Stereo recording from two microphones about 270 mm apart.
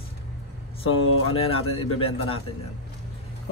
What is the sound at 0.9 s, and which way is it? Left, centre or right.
Speech, left.